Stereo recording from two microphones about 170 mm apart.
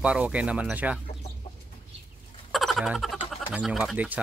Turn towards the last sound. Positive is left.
turn(degrees=-10)  # may be behind; listen again after turning